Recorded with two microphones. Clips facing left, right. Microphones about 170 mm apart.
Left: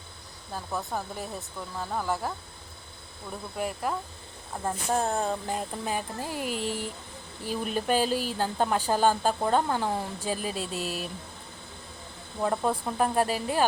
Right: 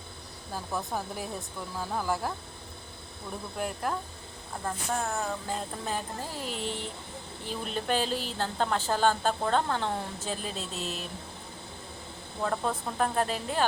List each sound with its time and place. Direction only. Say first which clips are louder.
0.5 s speech: left 1 dB; centre (ahead or behind)
3.8 s speech: left 1 dB; 5° left (ahead or behind)
4.6 s a sound: left 4 dB; 30° left (ahead or behind)
5.5 s a woman's voice: left 2 dB; 10° left (ahead or behind)
12.4 s a woman's voice: left 3 dB; 10° left (ahead or behind)